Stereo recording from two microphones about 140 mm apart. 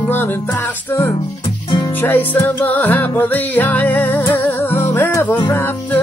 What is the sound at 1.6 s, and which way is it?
Music, 35° left (ahead or behind).